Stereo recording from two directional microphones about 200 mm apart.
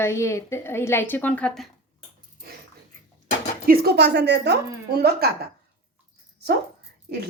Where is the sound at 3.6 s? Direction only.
50° right (ahead or behind).